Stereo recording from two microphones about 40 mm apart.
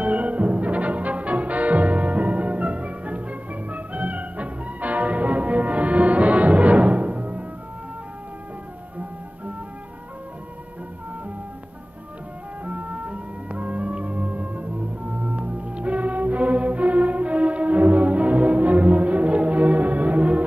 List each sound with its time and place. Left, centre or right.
0.0 s music: right
12.6 s music: right